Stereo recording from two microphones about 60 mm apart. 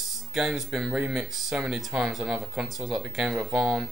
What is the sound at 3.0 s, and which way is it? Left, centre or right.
Speech, centre.